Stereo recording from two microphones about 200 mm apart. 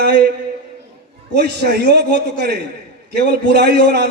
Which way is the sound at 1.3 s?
55° right (ahead or behind).